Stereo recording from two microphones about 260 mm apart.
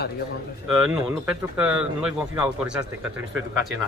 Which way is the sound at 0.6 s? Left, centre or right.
Centre.